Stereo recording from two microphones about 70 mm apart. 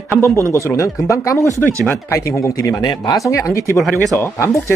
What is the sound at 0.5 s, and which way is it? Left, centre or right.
Speech, left.